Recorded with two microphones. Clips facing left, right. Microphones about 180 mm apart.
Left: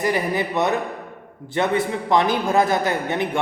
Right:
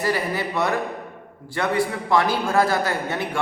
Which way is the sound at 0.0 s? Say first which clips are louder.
Left 2 dB; 20° left (ahead or behind).